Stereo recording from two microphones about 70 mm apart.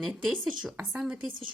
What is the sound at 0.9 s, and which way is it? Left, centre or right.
Speech, centre.